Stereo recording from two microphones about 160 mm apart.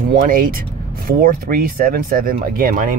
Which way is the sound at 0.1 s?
60° right (ahead or behind).